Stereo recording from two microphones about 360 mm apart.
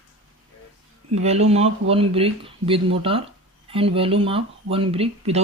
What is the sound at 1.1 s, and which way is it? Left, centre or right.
Speech, centre.